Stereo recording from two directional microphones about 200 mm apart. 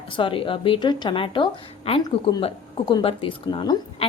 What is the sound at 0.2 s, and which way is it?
A woman's voice, 25° left (ahead or behind).